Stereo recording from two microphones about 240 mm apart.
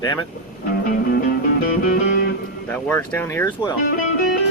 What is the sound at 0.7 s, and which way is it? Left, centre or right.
Music, left.